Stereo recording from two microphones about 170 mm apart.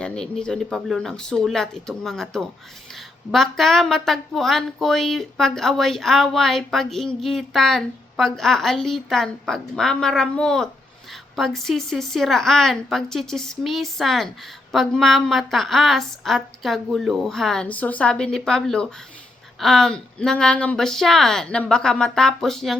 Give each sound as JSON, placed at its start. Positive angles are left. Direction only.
{"t": 0.0, "sound": "speech", "side_deg": 5}